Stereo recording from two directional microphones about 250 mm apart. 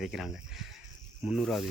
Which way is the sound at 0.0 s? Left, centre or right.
Centre.